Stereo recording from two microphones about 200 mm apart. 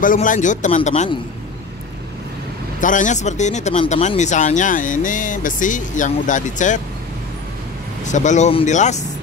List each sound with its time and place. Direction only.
0.0 s speech: 40° left (ahead or behind)
2.8 s speech: 40° left (ahead or behind)
8.0 s speech: 35° left (ahead or behind)